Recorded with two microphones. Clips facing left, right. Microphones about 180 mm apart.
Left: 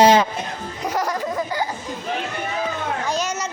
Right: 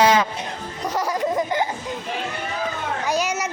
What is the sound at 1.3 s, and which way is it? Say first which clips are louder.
Laughter: right 2 dB; 20° right (ahead or behind).